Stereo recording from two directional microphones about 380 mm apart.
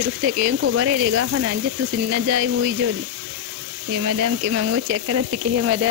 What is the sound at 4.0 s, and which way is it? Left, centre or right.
Speech, right.